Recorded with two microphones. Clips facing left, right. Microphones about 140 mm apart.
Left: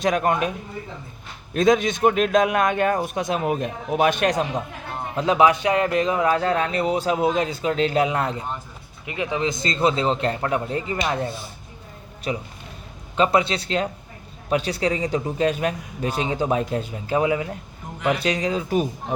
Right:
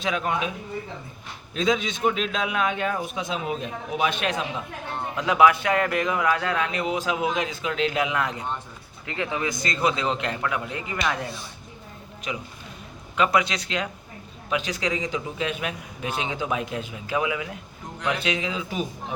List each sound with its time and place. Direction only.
0.0 s a man's voice: 50° left (ahead or behind)
1.5 s a man's voice: 50° left (ahead or behind)
5.1 s a man's voice: 30° left (ahead or behind)
9.0 s a man's voice: 20° left (ahead or behind); by 18.9 s 45° left (ahead or behind)